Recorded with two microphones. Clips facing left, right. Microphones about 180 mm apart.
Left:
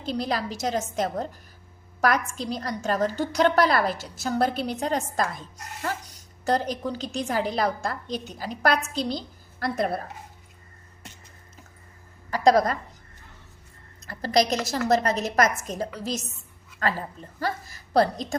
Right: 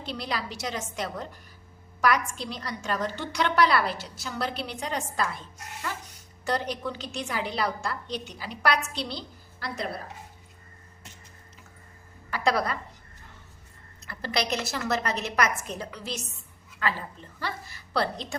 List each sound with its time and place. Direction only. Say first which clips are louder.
0.0 s a woman's voice: left 5 dB; 45° left (ahead or behind)
12.5 s a woman's voice: left 7 dB; 40° left (ahead or behind)
14.1 s a woman's voice: left 6 dB; 40° left (ahead or behind)
17.4 s a woman's voice: left 6 dB; 40° left (ahead or behind)